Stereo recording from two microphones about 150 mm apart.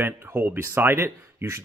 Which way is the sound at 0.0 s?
15° right (ahead or behind).